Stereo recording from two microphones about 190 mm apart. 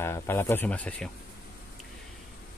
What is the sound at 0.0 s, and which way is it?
Speech, 10° left (ahead or behind).